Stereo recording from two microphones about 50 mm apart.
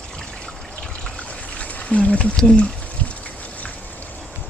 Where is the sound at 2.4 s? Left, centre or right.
Centre.